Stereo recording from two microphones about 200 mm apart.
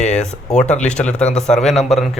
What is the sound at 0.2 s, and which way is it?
A man's voice, 5° left (ahead or behind).